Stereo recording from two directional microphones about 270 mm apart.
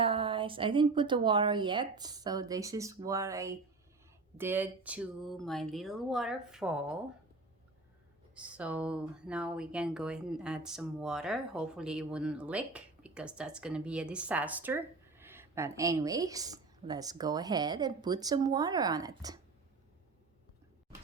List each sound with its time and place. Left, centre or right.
0.0 s a woman's voice: centre
8.4 s speech: centre